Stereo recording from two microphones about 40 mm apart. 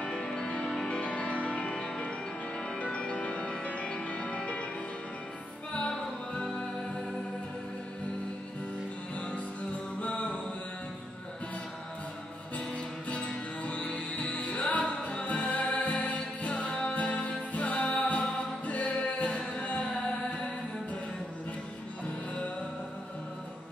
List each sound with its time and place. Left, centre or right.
0.0 s music: left
9.9 s music: left
12.5 s music: left